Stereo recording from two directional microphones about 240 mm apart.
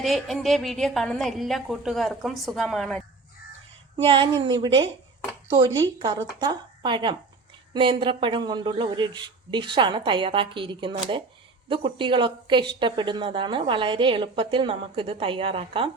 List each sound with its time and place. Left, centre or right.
0.0 s a woman's voice: centre
3.9 s speech: centre